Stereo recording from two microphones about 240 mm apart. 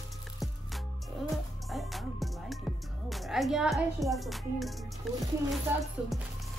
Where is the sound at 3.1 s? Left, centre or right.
Centre.